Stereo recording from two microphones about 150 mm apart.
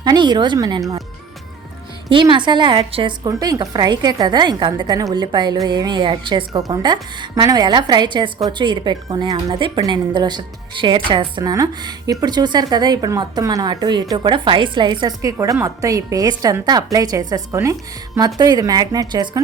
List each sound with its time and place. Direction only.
0.0 s a woman's voice: 30° right (ahead or behind)
2.0 s speech: 35° right (ahead or behind)